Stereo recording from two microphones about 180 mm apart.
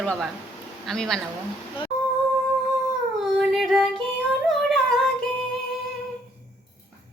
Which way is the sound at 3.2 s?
Centre (ahead or behind).